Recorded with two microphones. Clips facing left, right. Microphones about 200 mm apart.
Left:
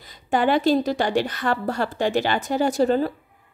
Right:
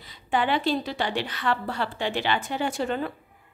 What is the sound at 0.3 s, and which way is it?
A woman's voice, 45° left (ahead or behind).